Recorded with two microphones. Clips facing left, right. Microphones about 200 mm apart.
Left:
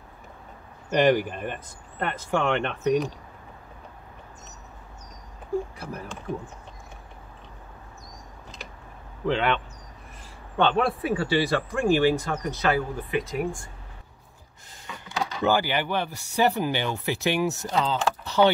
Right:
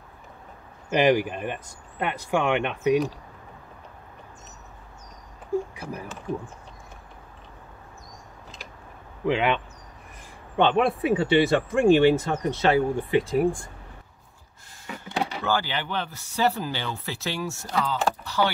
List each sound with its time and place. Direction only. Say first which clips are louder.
0.9 s speech: even; 5° right (ahead or behind)
5.8 s speech: right 1 dB; 10° right (ahead or behind)
9.2 s speech: right 1 dB; 10° right (ahead or behind)
10.6 s speech: right 2 dB; 20° right (ahead or behind)
15.1 s power windows: right 2 dB; 30° right (ahead or behind)
15.4 s speech: left 8 dB; 15° left (ahead or behind)